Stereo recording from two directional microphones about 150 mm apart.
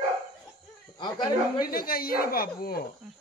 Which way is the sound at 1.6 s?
80° left.